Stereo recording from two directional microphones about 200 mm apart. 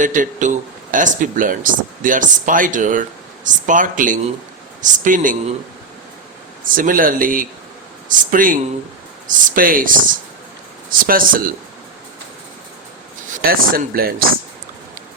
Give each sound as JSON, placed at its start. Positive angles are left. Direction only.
{"t": 0.0, "sound": "speech", "side_deg": -40}
{"t": 6.7, "sound": "speech", "side_deg": -40}
{"t": 11.0, "sound": "speech", "side_deg": -45}
{"t": 13.4, "sound": "speech", "side_deg": -45}